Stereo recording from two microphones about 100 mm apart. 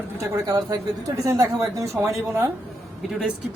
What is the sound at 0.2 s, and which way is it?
Speech, 35° right (ahead or behind).